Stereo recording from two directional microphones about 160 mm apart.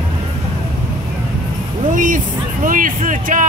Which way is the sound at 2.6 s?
60° right (ahead or behind).